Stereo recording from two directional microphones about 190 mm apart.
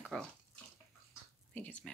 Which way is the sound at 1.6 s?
5° left (ahead or behind).